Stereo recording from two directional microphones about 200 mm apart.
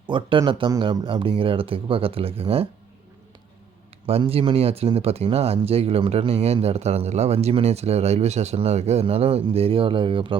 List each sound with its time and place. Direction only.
0.1 s speech: 25° right (ahead or behind)
4.0 s speech: 30° right (ahead or behind)